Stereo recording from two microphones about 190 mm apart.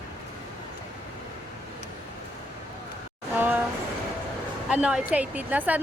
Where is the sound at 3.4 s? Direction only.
10° right (ahead or behind).